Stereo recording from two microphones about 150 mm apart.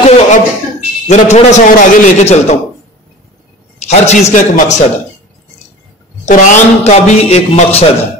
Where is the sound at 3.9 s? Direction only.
50° left (ahead or behind).